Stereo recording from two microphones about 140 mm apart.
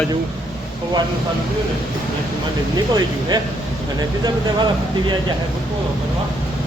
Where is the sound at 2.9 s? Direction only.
30° right (ahead or behind).